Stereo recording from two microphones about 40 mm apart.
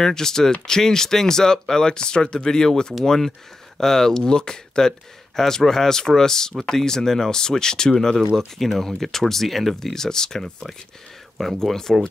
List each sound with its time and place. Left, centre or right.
0.0 s speech: centre
8.5 s speech: centre